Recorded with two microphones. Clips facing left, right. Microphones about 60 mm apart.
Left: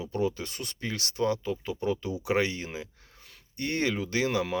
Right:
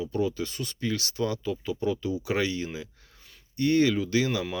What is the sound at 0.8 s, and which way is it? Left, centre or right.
Speech, left.